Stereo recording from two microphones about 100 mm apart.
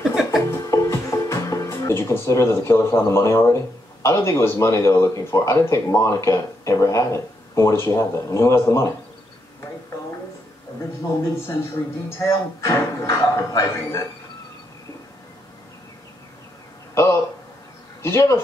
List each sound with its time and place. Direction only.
0.1 s music: 5° right (ahead or behind)
0.5 s speech: 30° left (ahead or behind)
12.1 s speech: 25° left (ahead or behind)
16.9 s a sound: 25° left (ahead or behind)
18.0 s speech: 25° left (ahead or behind)